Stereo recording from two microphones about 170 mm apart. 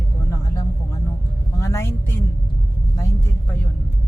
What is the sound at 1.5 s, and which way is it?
Vehicle, 20° left (ahead or behind).